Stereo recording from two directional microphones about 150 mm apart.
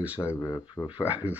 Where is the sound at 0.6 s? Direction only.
35° left (ahead or behind).